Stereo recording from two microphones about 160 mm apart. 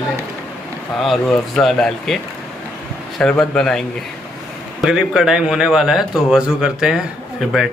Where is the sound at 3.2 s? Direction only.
5° left (ahead or behind).